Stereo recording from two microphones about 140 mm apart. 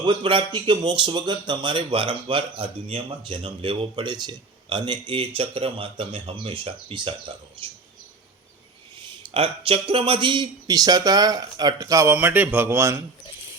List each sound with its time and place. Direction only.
0.0 s speech: 40° right (ahead or behind)
9.3 s a man's voice: 45° right (ahead or behind); by 12.1 s 25° right (ahead or behind)
12.1 s speech: 10° right (ahead or behind)